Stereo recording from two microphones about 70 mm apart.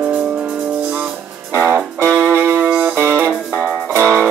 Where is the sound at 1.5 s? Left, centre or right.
Right.